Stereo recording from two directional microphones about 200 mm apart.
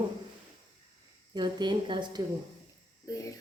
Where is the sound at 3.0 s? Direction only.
15° left (ahead or behind).